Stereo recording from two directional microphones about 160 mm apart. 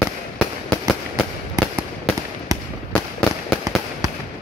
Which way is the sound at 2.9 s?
5° left (ahead or behind).